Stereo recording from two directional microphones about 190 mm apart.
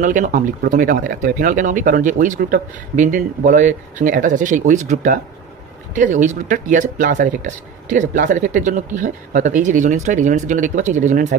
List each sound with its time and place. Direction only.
0.0 s speech: 40° right (ahead or behind)